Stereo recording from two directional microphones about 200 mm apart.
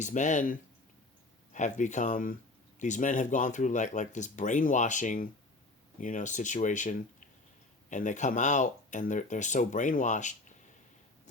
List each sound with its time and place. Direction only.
0.0 s speech: 35° left (ahead or behind)